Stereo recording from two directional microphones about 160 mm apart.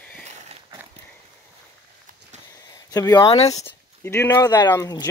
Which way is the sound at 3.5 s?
15° left (ahead or behind).